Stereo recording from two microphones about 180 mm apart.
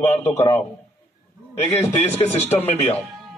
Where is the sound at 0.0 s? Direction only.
15° left (ahead or behind).